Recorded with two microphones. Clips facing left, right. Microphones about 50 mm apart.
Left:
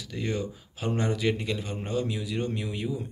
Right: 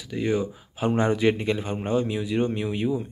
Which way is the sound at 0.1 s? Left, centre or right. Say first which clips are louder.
Right 6 dB; centre.